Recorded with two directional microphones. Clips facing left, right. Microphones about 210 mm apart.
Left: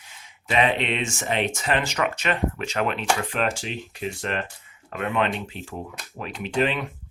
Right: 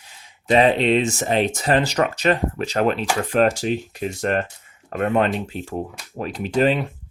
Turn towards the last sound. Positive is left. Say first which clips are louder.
# right 5 dB
turn(degrees=-35)  # may be behind; listen again after turning